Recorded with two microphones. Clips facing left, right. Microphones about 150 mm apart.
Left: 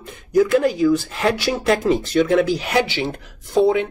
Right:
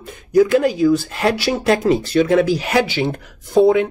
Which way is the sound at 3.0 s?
10° right (ahead or behind).